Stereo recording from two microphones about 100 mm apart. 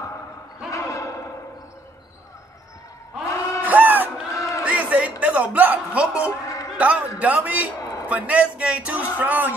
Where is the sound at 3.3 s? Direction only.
30° left (ahead or behind).